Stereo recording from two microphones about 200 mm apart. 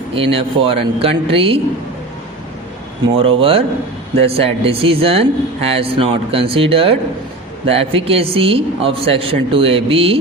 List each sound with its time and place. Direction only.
0.1 s speech: 30° right (ahead or behind)
3.2 s speech: 25° right (ahead or behind)